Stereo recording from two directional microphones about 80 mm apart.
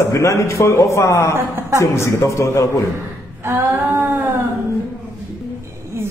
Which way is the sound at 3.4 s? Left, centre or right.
Right.